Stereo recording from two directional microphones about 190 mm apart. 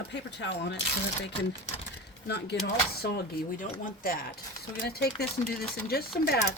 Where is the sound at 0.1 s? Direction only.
65° left (ahead or behind).